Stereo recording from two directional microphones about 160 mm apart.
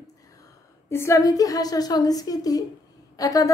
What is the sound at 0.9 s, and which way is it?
A woman's voice, 20° left (ahead or behind).